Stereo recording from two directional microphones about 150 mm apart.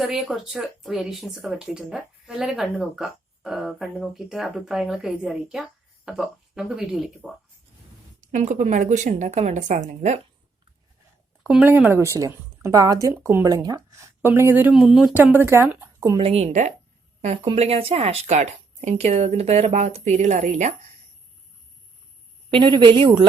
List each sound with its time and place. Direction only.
0.0 s speech: centre (ahead or behind)
8.2 s speech: 55° right (ahead or behind)
11.4 s speech: 10° right (ahead or behind)
14.8 s speech: centre (ahead or behind)
15.1 s speech: 10° right (ahead or behind)
16.2 s speech: 45° right (ahead or behind)
22.4 s speech: 30° right (ahead or behind)